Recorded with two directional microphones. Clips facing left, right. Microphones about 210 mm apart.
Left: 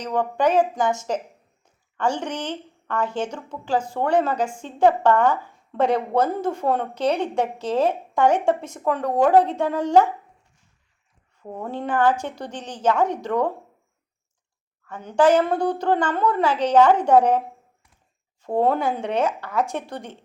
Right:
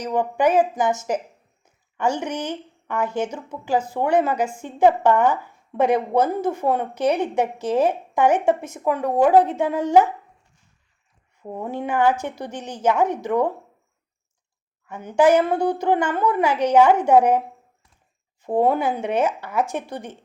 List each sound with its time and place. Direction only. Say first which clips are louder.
0.0 s a woman's voice: right 1 dB; 10° right (ahead or behind)
11.4 s a woman's voice: right 1 dB; 10° right (ahead or behind)
14.8 s a woman's voice: right 1 dB; 10° right (ahead or behind)
18.4 s a woman's voice: right 1 dB; 15° right (ahead or behind)
18.7 s a woman's voice: right 1 dB; centre (ahead or behind)